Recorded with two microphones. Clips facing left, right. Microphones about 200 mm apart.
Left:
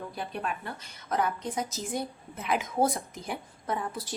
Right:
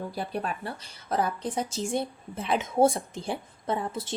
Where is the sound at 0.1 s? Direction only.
35° right (ahead or behind).